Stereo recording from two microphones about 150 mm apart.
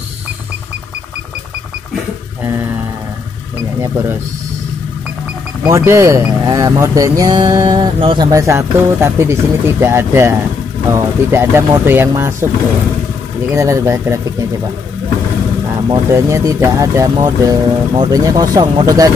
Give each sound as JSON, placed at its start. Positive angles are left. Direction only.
{"t": 2.4, "sound": "speech", "side_deg": -15}
{"t": 5.7, "sound": "speech", "side_deg": -20}
{"t": 8.3, "sound": "speech", "side_deg": -20}
{"t": 13.5, "sound": "speech", "side_deg": -20}
{"t": 15.9, "sound": "speech", "side_deg": -20}